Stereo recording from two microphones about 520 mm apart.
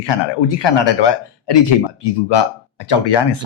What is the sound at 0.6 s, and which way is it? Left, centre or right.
Speech, left.